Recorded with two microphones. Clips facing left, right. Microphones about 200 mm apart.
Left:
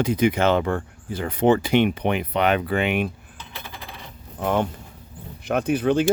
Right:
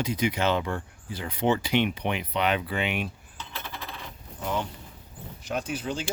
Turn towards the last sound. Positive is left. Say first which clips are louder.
# left 11 dB
turn(degrees=60)  # may be behind; listen again after turning